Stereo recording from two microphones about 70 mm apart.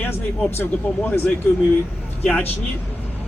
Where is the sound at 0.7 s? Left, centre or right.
Left.